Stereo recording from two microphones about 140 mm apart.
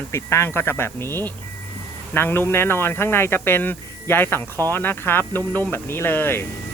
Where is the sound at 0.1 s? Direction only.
20° left (ahead or behind).